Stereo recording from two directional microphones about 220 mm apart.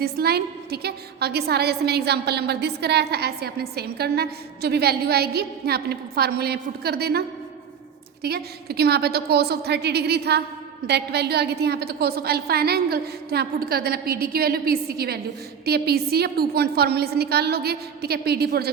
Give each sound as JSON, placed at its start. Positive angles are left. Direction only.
{"t": 0.0, "sound": "a woman's voice", "side_deg": -45}